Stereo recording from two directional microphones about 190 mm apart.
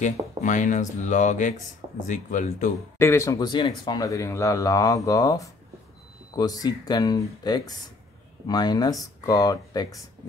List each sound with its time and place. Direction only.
0.4 s speech: 40° left (ahead or behind)
3.0 s speech: 15° left (ahead or behind)